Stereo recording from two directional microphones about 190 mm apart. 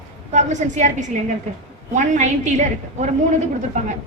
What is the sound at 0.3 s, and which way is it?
A woman's voice, 40° right (ahead or behind).